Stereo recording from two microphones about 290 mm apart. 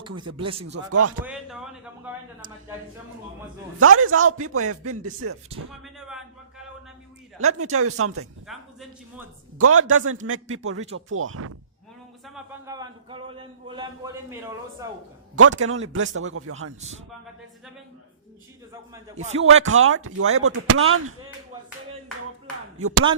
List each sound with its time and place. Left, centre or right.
0.3 s speech: right
1.2 s speech: centre
3.8 s a man's voice: right
5.8 s speech: centre
7.3 s a man's voice: right
8.4 s speech: centre
9.6 s a man's voice: right
12.2 s a man's voice: centre
12.7 s a man's voice: centre
15.4 s a man's voice: right
19.1 s music: right
19.4 s a man's voice: right